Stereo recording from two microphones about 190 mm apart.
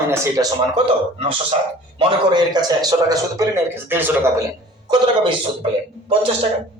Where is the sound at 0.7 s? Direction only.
30° right (ahead or behind).